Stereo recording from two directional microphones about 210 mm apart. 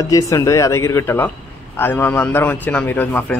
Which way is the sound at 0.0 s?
15° left (ahead or behind).